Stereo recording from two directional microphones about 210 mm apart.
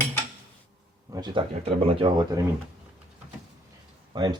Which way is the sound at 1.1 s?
20° right (ahead or behind).